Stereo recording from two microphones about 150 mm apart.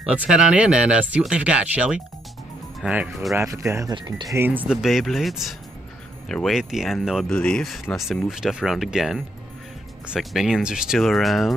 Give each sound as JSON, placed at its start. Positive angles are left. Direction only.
{"t": 0.0, "sound": "speech", "side_deg": -5}
{"t": 3.3, "sound": "speech", "side_deg": -20}
{"t": 4.4, "sound": "speech", "side_deg": -10}